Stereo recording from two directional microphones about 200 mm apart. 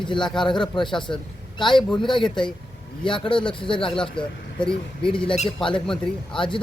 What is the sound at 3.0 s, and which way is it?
Speech, 25° left (ahead or behind).